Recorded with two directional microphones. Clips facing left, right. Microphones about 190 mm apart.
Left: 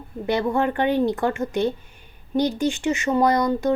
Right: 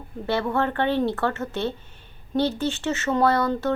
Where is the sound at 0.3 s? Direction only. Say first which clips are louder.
Left 2 dB; 15° left (ahead or behind).